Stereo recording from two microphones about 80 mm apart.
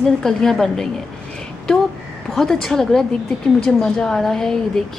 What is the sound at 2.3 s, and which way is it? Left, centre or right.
A woman's voice, centre.